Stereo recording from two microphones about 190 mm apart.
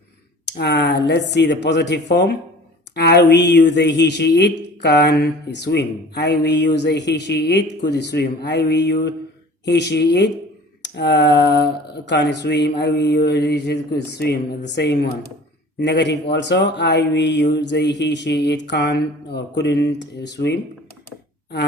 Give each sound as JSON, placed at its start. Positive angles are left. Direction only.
{"t": 0.4, "sound": "speech", "side_deg": 60}